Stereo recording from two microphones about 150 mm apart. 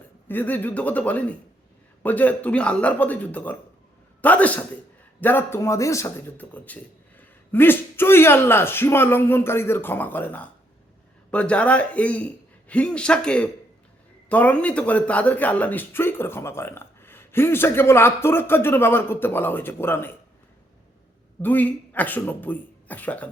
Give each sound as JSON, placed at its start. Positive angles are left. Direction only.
{"t": 0.3, "sound": "a man's voice", "side_deg": 10}
{"t": 21.4, "sound": "a man's voice", "side_deg": 10}